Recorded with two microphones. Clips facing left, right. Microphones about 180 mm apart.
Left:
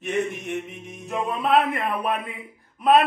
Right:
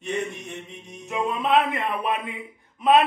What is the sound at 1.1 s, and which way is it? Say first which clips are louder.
A man's voice: left 1 dB; centre (ahead or behind).